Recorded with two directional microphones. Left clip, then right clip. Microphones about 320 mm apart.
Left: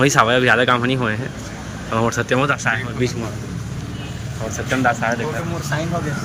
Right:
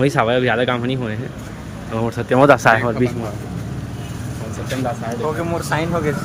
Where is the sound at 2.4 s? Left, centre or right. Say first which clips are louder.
Right 8 dB; centre.